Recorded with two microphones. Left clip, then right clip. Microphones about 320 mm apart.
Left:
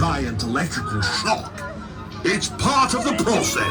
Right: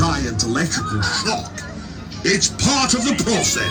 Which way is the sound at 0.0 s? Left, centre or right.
Centre.